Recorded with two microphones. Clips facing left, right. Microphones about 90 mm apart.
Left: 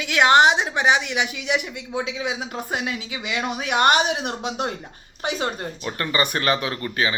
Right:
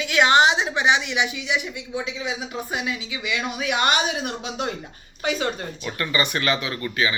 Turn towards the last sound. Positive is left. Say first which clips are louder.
# even
turn(degrees=35)  # may be behind; listen again after turning